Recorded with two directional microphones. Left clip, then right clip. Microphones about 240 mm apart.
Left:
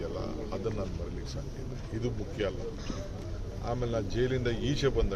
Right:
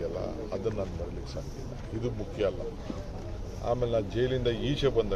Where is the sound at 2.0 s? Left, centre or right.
Centre.